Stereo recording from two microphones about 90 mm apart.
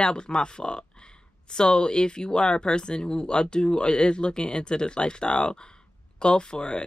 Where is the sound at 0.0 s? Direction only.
10° left (ahead or behind).